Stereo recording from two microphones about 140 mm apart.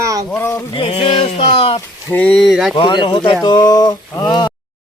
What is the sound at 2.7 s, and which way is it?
Speech, 35° left (ahead or behind).